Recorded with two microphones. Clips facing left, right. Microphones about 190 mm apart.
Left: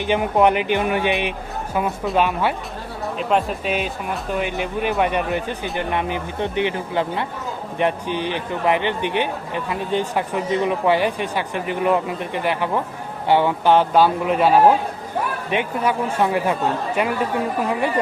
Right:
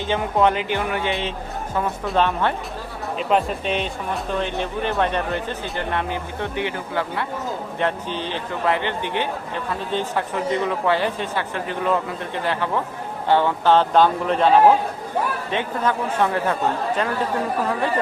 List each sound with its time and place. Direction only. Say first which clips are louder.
0.1 s speech: left 3 dB; 15° left (ahead or behind)